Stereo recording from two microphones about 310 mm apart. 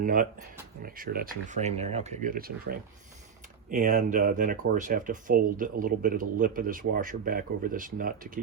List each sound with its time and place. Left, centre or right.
0.0 s speech: right